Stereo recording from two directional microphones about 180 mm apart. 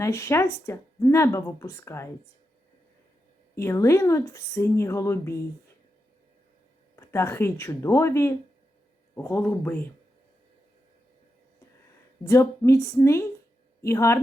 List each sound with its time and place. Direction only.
0.0 s speech: 15° left (ahead or behind)
3.6 s speech: 15° left (ahead or behind)
6.9 s speech: 15° left (ahead or behind)
12.2 s speech: 15° left (ahead or behind)